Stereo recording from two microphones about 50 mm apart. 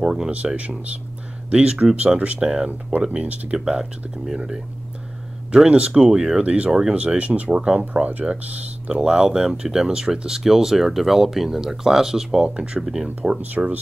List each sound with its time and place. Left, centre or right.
0.0 s speech: centre
1.5 s speech: right
2.4 s speech: centre
3.5 s speech: centre
5.7 s speech: right
8.8 s speech: centre